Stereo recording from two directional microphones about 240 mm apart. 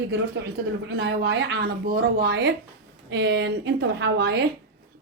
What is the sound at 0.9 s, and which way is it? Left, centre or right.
A woman's voice, right.